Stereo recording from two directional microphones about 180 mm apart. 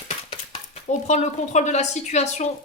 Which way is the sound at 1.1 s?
40° left (ahead or behind).